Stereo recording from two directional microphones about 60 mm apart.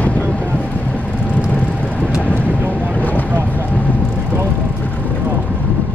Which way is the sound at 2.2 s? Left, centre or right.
Left.